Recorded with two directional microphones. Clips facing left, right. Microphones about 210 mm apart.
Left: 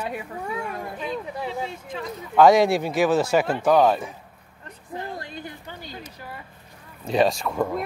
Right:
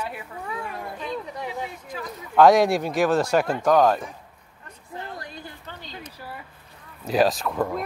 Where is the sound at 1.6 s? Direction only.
25° left (ahead or behind).